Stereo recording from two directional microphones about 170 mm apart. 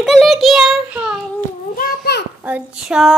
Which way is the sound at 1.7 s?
65° left (ahead or behind).